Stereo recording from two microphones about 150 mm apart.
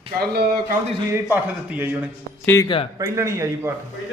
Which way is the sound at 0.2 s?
90° right.